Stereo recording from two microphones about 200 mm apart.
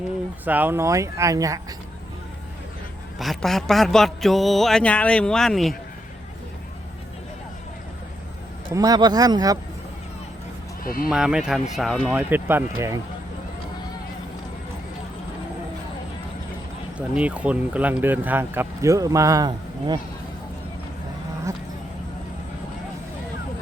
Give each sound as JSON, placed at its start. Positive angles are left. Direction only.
{"t": 0.4, "sound": "speech", "side_deg": -10}
{"t": 3.2, "sound": "mantra", "side_deg": 0}
{"t": 8.7, "sound": "speech", "side_deg": -20}
{"t": 10.8, "sound": "speech", "side_deg": 45}
{"t": 11.1, "sound": "mantra", "side_deg": -5}
{"t": 11.7, "sound": "speech", "side_deg": 0}
{"t": 17.2, "sound": "speech", "side_deg": -5}